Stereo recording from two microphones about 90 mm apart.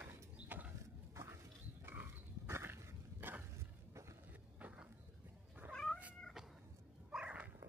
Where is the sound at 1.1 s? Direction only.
35° right (ahead or behind).